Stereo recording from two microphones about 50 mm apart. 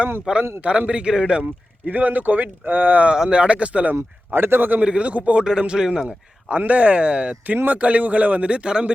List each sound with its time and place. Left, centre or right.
0.3 s speech: right
1.9 s speech: right
3.1 s speech: centre
4.3 s a man's voice: right
4.8 s speech: right
5.4 s a man's voice: centre
6.7 s speech: right